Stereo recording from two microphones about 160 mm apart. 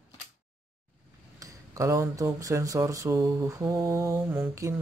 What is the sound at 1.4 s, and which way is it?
Speech, 20° right (ahead or behind).